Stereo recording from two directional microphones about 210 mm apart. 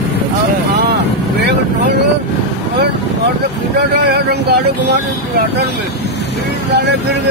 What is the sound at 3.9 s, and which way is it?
Speech, 50° right (ahead or behind).